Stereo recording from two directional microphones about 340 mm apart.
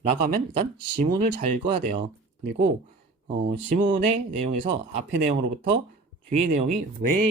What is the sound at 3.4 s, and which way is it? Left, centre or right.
Speech, centre.